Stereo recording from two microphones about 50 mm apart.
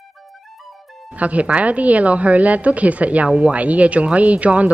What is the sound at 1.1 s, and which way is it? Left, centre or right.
Speech, right.